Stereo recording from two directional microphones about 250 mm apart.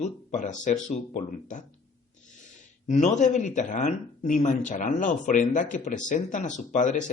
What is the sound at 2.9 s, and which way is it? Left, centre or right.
Speech, left.